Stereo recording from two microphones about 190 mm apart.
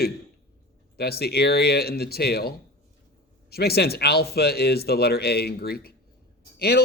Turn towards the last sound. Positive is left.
turn(degrees=60)  # may be behind; listen again after turning